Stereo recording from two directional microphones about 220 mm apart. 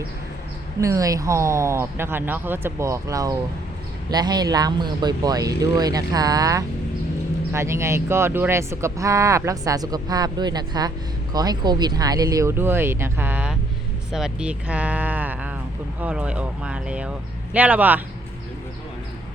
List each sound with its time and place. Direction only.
0.8 s speech: 15° right (ahead or behind)